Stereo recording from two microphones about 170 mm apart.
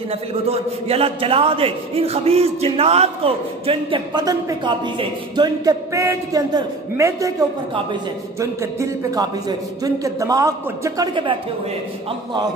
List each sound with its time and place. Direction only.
0.5 s a man's voice: 35° right (ahead or behind)